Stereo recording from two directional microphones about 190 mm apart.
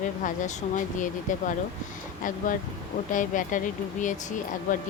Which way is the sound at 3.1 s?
45° left (ahead or behind).